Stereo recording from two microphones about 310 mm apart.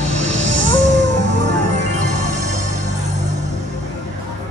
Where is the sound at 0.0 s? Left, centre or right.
Right.